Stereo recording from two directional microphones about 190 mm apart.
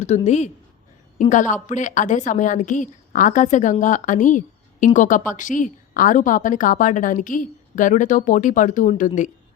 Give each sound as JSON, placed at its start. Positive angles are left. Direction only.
{"t": 0.0, "sound": "a woman's voice", "side_deg": 35}